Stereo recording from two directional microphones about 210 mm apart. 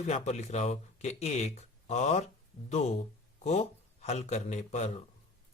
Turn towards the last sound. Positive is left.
turn(degrees=35)  # may be behind; listen again after turning